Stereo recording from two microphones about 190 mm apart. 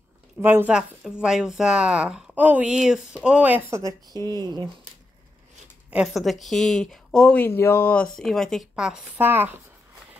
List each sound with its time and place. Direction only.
0.4 s speech: 10° right (ahead or behind)
3.7 s speech: 20° right (ahead or behind)
5.9 s speech: 5° right (ahead or behind)